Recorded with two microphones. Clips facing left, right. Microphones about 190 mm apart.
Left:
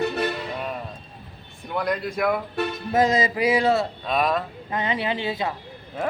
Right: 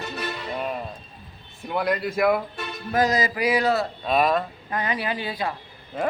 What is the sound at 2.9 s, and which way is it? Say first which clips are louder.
Speech: left 1 dB; 25° left (ahead or behind).